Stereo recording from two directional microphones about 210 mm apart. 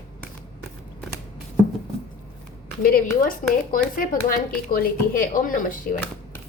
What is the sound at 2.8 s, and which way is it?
Speech, 45° left (ahead or behind).